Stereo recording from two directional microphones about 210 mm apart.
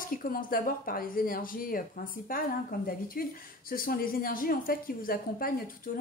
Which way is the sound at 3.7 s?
45° left (ahead or behind).